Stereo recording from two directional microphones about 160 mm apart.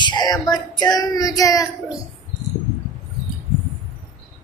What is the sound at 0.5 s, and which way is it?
Child singing, 25° left (ahead or behind).